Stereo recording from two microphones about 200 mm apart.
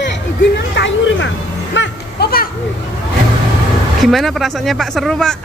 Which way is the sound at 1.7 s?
60° left (ahead or behind).